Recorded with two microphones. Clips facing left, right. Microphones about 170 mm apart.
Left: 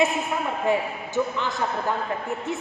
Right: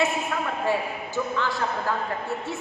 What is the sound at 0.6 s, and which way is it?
A woman's voice, 20° left (ahead or behind).